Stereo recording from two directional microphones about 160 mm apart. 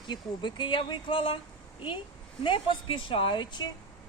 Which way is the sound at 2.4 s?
30° left (ahead or behind).